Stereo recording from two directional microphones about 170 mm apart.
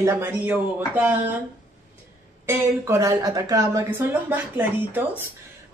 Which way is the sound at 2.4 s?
15° right (ahead or behind).